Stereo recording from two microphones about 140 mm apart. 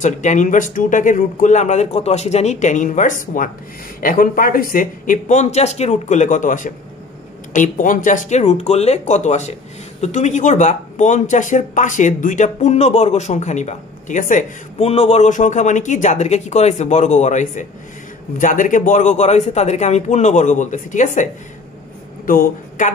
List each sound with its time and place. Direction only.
0.0 s speech: 60° left (ahead or behind)
14.9 s speech: 45° left (ahead or behind); by 21.3 s 65° left (ahead or behind)
22.2 s speech: 80° left